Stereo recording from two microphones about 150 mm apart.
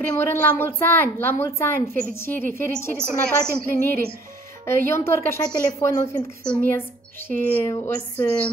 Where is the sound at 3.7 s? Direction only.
85° right.